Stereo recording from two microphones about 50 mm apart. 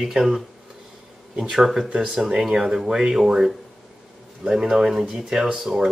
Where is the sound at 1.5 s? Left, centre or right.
Centre.